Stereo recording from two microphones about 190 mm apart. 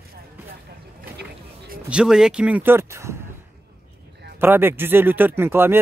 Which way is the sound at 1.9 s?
5° right (ahead or behind).